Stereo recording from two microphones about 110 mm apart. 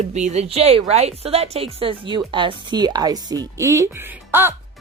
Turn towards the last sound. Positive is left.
turn(degrees=-20)  # may be behind; listen again after turning